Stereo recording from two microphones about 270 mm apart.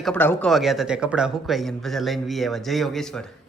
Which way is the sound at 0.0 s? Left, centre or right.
Centre.